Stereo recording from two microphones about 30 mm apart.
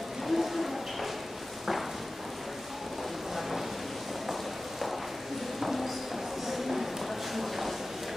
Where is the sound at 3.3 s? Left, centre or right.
Centre.